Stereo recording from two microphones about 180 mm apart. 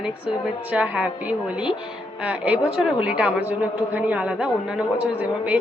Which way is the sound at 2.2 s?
10° right (ahead or behind).